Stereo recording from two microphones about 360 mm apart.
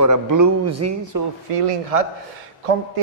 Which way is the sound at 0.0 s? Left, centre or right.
Right.